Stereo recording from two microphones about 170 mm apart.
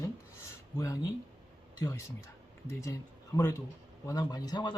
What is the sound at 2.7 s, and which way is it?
Speech, 15° left (ahead or behind).